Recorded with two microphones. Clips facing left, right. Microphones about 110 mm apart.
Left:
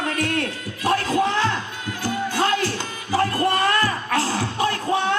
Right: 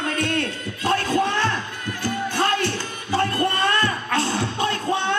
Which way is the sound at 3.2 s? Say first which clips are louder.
Left 2 dB; 30° left (ahead or behind).